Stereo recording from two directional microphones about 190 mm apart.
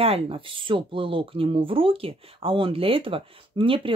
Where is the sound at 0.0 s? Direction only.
30° right (ahead or behind).